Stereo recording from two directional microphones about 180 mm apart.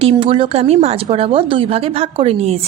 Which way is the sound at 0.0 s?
30° right (ahead or behind).